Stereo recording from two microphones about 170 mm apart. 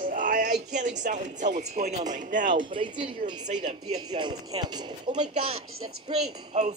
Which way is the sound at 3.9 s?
25° right (ahead or behind).